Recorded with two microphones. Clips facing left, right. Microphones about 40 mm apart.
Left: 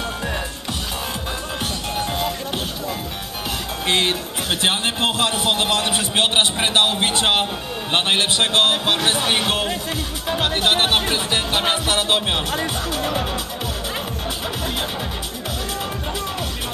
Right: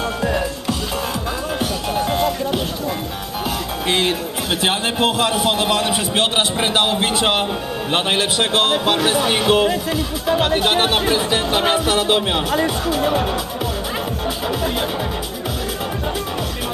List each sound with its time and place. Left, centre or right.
3.8 s a man's voice: left
6.1 s a man's voice: left
6.7 s a man's voice: left
8.2 s a man's voice: left
11.8 s a man's voice: left
12.9 s speech: right